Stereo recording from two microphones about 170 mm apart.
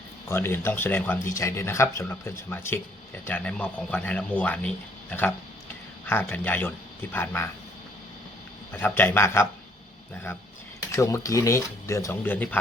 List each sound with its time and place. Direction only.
0.3 s speech: 15° left (ahead or behind)
8.7 s speech: 10° left (ahead or behind)
10.9 s speech: 20° left (ahead or behind)